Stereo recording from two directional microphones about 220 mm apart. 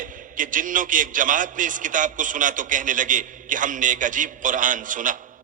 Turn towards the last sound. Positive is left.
turn(degrees=-35)  # may be behind; listen again after turning